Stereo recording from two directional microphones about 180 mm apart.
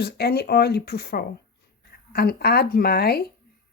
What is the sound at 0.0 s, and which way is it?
Speech, 65° left (ahead or behind).